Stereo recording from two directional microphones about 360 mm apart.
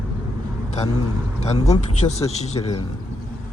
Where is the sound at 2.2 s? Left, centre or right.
Centre.